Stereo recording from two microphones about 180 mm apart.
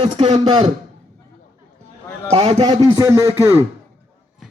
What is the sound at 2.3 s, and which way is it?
Speech, 35° right (ahead or behind).